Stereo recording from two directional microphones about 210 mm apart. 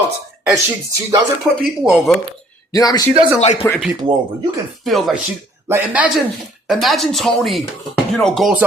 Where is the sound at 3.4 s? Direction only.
30° left (ahead or behind).